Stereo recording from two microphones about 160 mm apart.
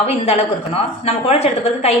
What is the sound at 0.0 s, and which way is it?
A woman's voice, 40° left (ahead or behind).